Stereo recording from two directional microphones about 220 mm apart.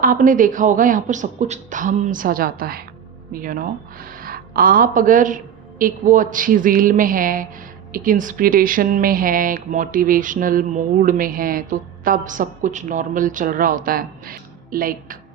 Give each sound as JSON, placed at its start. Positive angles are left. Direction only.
{"t": 0.0, "sound": "speech", "side_deg": -40}